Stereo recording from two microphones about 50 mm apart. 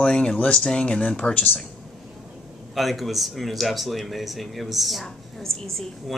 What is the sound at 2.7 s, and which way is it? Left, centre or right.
Speech, centre.